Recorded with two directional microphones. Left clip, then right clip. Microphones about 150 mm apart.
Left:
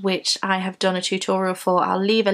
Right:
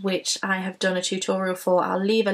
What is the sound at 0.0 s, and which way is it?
Speech, 35° left (ahead or behind).